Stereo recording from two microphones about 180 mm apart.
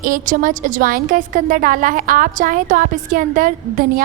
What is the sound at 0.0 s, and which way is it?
A woman's voice, 50° right (ahead or behind).